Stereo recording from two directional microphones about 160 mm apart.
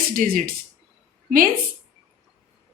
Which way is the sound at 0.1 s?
60° right (ahead or behind).